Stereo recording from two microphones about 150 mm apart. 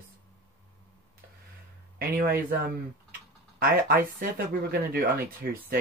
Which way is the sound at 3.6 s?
90° right.